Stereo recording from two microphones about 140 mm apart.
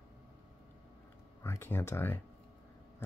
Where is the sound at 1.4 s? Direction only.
15° left (ahead or behind).